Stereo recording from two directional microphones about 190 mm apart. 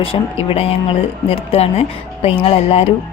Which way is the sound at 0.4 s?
30° left (ahead or behind).